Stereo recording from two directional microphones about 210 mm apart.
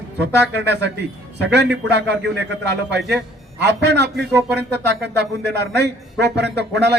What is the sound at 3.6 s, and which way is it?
Speech, 55° right (ahead or behind).